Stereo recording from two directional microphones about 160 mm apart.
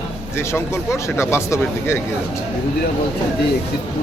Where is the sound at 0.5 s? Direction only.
15° left (ahead or behind).